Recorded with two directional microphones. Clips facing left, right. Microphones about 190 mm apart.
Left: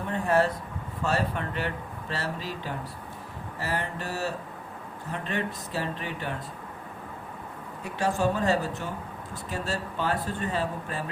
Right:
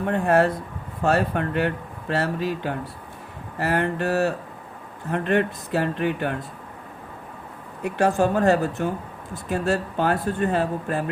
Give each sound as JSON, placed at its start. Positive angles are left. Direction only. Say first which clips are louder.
{"t": 0.1, "sound": "speech", "louder": "right 5 dB", "side_deg": -60}
{"t": 7.9, "sound": "speech", "louder": "right 6 dB", "side_deg": -55}